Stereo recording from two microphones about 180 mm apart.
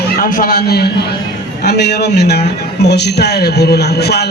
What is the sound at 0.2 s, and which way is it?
A man's voice, 50° left (ahead or behind).